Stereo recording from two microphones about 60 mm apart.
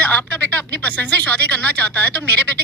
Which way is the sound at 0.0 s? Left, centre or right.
Left.